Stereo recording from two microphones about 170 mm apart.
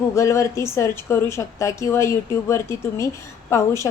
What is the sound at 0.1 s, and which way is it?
A woman's voice, 15° left (ahead or behind).